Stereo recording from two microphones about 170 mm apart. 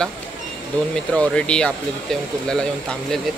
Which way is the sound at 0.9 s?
5° left (ahead or behind).